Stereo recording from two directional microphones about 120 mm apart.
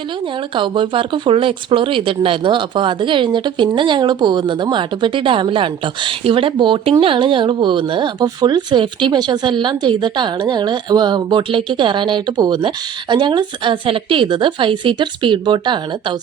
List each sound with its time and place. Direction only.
0.3 s a woman's voice: 45° right (ahead or behind)